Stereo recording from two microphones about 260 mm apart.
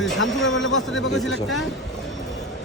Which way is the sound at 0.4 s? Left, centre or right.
Left.